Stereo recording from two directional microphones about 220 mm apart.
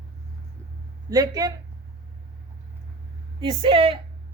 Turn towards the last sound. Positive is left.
turn(degrees=-25)  # may be behind; listen again after turning